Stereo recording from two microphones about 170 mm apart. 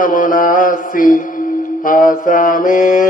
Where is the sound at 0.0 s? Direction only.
55° left (ahead or behind).